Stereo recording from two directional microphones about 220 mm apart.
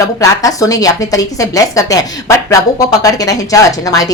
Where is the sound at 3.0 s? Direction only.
15° left (ahead or behind).